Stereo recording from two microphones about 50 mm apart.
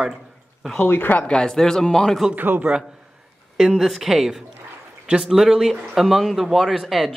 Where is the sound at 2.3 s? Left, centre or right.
Right.